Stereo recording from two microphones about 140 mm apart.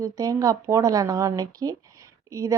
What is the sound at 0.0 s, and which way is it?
Speech, 25° right (ahead or behind).